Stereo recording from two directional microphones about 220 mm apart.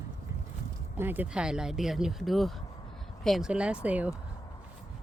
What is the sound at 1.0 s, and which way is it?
Speech, 10° right (ahead or behind).